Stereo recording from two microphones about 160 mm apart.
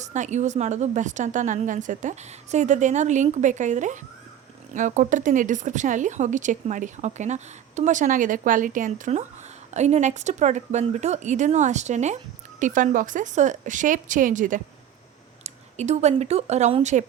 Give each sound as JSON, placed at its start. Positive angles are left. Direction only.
{"t": 0.0, "sound": "a woman's voice", "side_deg": -50}
{"t": 15.4, "sound": "speech", "side_deg": -45}